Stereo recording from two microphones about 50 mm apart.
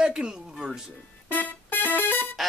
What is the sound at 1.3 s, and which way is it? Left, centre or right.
Music, left.